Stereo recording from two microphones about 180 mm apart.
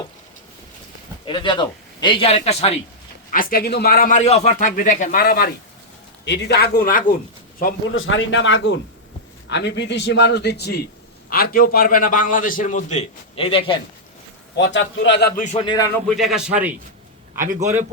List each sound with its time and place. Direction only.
1.3 s a man's voice: 25° left (ahead or behind)
3.3 s a man's voice: 50° left (ahead or behind)
6.2 s a man's voice: 70° left (ahead or behind); by 7.0 s 55° left (ahead or behind)
7.9 s a man's voice: 90° left; by 13.7 s 30° left (ahead or behind)
14.5 s a man's voice: 80° left
15.5 s a man's voice: 25° left (ahead or behind)
16.0 s speech: centre (ahead or behind)